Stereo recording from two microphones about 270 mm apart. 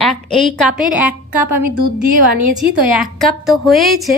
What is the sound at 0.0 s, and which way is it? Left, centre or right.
A woman's voice, centre.